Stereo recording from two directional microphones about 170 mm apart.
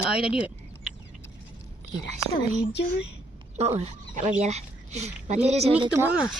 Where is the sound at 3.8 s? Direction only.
45° right (ahead or behind).